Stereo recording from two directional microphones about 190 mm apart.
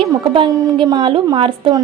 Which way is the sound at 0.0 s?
25° right (ahead or behind).